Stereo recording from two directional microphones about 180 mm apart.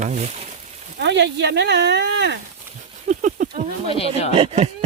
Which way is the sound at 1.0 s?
75° right (ahead or behind).